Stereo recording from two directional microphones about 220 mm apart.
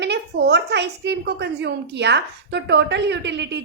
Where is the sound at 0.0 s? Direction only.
50° right (ahead or behind).